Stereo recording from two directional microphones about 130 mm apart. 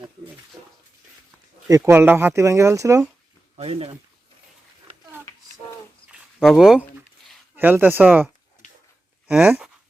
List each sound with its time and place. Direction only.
1.9 s speech: 15° right (ahead or behind)
3.6 s speech: 50° right (ahead or behind)
6.1 s a sound: 5° right (ahead or behind)
7.5 s speech: 15° right (ahead or behind)
9.3 s speech: 5° right (ahead or behind)